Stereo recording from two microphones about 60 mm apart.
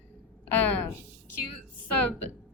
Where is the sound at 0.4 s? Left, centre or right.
Left.